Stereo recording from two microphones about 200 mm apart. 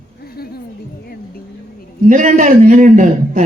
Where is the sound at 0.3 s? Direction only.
50° left (ahead or behind).